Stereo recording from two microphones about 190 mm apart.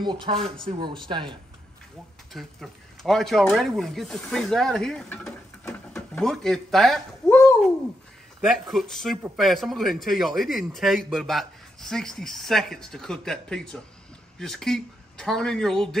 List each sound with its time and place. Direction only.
0.0 s speech: 25° right (ahead or behind)
2.3 s a man's voice: centre (ahead or behind)
8.4 s a man's voice: centre (ahead or behind)